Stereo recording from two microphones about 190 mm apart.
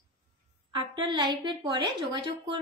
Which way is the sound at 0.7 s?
25° right (ahead or behind).